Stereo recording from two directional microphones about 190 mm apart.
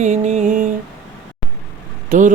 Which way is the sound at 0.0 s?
40° right (ahead or behind).